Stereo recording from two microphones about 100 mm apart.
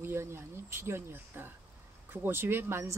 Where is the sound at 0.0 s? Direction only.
25° right (ahead or behind).